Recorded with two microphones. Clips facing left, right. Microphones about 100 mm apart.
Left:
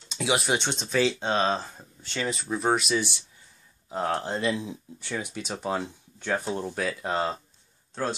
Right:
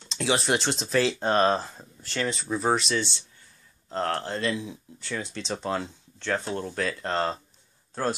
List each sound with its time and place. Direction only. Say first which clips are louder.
0.1 s speech: right 1 dB; 5° left (ahead or behind)